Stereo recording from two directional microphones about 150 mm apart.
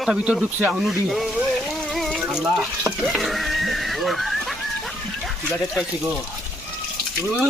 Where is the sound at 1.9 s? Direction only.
Centre (ahead or behind).